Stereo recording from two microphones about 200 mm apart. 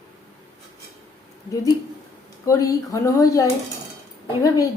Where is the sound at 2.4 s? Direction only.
15° left (ahead or behind).